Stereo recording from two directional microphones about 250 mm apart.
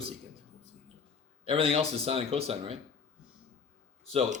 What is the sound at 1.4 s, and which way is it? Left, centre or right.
Speech, right.